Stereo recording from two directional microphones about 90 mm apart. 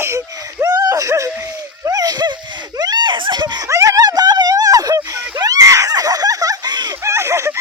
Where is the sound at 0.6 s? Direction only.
45° right (ahead or behind).